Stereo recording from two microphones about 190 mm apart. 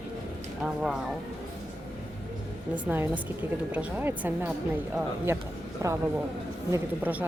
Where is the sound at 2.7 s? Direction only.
10° right (ahead or behind).